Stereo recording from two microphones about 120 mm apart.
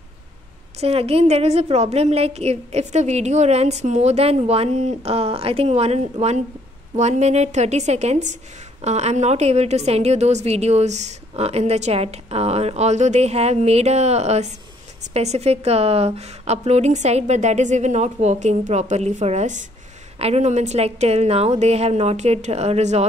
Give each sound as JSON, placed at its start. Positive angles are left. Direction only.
{"t": 0.7, "sound": "a woman's voice", "side_deg": -55}
{"t": 20.2, "sound": "a woman's voice", "side_deg": -60}